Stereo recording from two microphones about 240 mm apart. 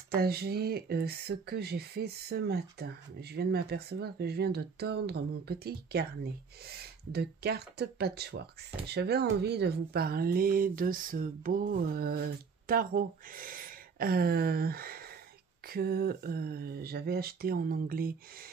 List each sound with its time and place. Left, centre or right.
0.1 s speech: right